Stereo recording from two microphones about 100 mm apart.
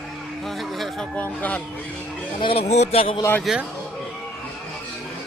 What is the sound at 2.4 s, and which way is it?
Speech, 85° left.